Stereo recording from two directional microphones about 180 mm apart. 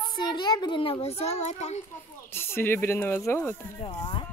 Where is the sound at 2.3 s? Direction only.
15° left (ahead or behind).